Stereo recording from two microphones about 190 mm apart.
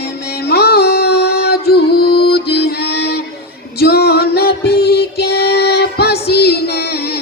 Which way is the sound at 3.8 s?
55° left (ahead or behind).